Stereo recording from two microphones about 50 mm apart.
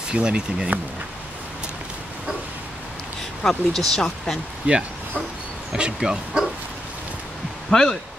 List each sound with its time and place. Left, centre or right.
0.1 s speech: centre
3.4 s speech: centre
4.7 s speech: right
5.9 s speech: centre
7.7 s speech: centre